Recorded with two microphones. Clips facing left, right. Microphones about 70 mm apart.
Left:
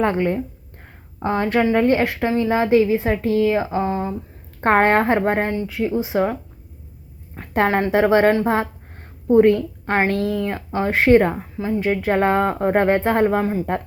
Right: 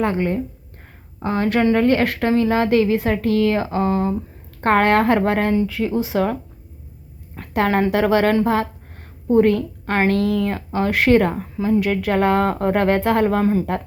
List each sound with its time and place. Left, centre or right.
0.0 s speech: left; by 4.1 s centre
4.6 s speech: left
7.9 s speech: left
8.4 s a sound: left
9.3 s a woman's voice: left
10.1 s speech: right
10.4 s speech: left
13.4 s speech: centre